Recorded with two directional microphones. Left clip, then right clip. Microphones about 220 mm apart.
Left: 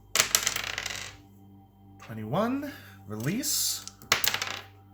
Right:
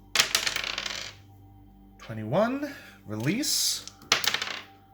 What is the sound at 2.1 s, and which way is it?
Speech, 35° right (ahead or behind).